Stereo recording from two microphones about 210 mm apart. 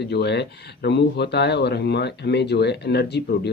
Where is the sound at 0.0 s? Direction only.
50° left (ahead or behind).